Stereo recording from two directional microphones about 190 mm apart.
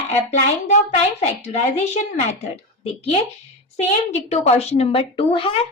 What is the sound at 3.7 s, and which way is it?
A woman's voice, 35° left (ahead or behind).